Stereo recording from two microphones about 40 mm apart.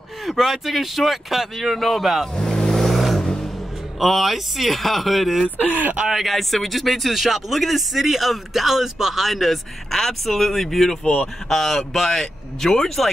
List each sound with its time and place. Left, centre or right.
0.2 s a man's voice: centre
2.3 s vehicle: centre
4.0 s a man's voice: centre
5.6 s speech: right
6.0 s a man's voice: centre